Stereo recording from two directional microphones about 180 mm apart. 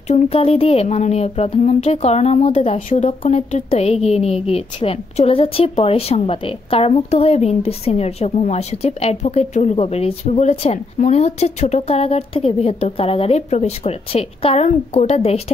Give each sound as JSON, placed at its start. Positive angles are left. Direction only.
{"t": 0.1, "sound": "speech", "side_deg": 35}